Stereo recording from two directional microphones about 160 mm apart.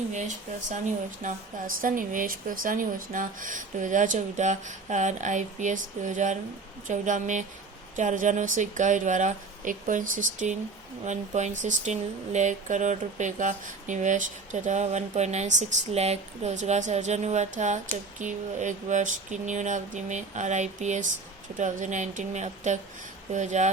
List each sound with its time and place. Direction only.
1.2 s speech: 60° right (ahead or behind)